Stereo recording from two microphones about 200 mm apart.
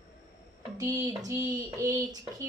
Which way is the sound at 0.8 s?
15° right (ahead or behind).